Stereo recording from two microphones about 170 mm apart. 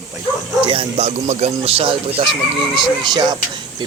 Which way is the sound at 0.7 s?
35° right (ahead or behind).